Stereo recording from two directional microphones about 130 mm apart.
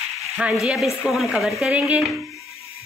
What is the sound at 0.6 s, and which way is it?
A woman's voice, centre (ahead or behind).